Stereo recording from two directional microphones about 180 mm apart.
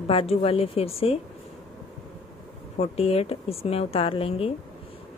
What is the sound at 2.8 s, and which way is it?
Speech, 35° left (ahead or behind).